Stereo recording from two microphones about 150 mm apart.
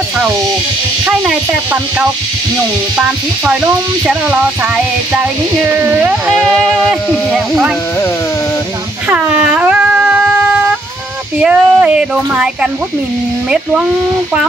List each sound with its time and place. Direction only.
1.0 s speech: 5° right (ahead or behind)
5.8 s speech: 15° right (ahead or behind)
6.3 s speech: 5° left (ahead or behind)
9.1 s a sound: 10° right (ahead or behind)
11.4 s speech: 5° right (ahead or behind)